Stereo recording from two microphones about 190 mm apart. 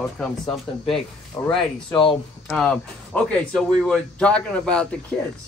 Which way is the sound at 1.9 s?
25° left (ahead or behind).